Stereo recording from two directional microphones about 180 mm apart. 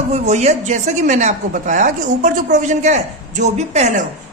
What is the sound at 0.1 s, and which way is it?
A woman's voice, 40° right (ahead or behind).